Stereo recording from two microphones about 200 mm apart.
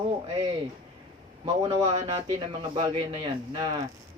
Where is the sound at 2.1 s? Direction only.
20° right (ahead or behind).